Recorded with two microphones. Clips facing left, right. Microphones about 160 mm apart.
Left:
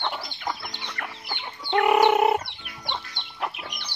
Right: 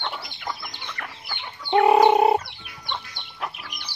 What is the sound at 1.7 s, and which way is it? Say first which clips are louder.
Fowl: right 3 dB; 30° right (ahead or behind).